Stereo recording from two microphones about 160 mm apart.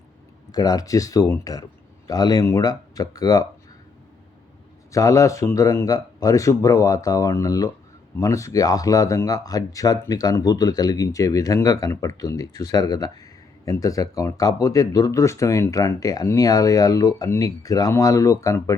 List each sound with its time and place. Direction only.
0.5 s speech: 25° left (ahead or behind)
4.9 s speech: 20° left (ahead or behind)